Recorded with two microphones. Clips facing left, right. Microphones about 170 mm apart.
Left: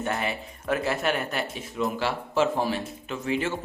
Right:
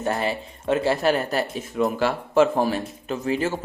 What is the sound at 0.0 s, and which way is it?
Speech, 35° right (ahead or behind).